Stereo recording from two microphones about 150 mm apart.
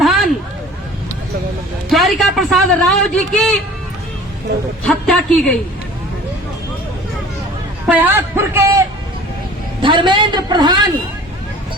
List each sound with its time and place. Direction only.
0.0 s a sound: centre (ahead or behind)
1.9 s a man's voice: centre (ahead or behind)
4.9 s a woman's voice: 5° left (ahead or behind)
7.9 s a man's voice: 10° right (ahead or behind)
9.8 s a man's voice: 30° right (ahead or behind)